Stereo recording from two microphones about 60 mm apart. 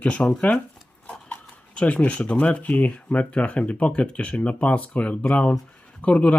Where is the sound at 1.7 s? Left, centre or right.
Left.